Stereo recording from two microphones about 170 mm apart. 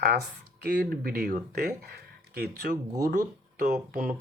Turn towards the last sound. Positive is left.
turn(degrees=-55)  # may be behind; listen again after turning